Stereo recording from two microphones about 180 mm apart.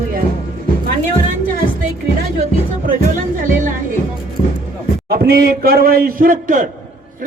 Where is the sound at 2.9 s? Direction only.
45° right (ahead or behind).